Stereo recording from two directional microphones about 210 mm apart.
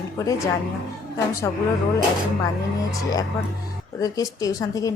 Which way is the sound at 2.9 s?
15° left (ahead or behind).